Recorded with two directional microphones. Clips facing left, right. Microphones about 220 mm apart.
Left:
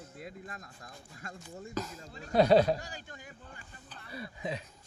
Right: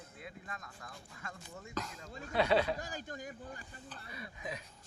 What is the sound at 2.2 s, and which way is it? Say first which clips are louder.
Speech: left 7 dB; 40° left (ahead or behind).